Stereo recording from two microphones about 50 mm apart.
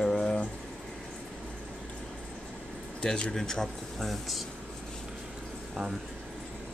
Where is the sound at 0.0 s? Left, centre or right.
Centre.